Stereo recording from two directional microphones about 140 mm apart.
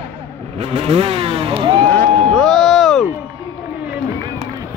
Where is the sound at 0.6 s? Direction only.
45° right (ahead or behind).